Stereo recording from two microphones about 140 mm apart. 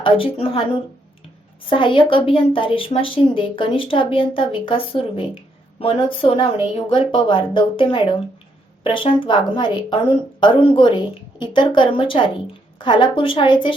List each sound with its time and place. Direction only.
0.0 s speech: 40° left (ahead or behind)
1.7 s speech: 35° left (ahead or behind)